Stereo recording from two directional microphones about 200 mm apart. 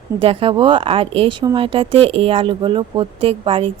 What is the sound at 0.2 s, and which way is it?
Speech, 25° right (ahead or behind).